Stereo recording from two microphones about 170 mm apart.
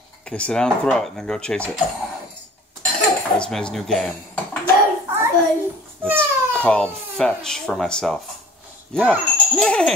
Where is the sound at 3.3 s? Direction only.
5° left (ahead or behind).